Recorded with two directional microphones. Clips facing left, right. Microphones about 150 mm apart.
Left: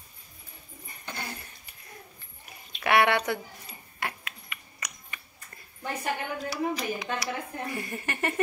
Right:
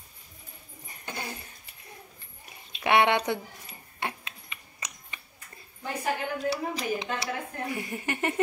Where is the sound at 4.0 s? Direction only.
25° right (ahead or behind).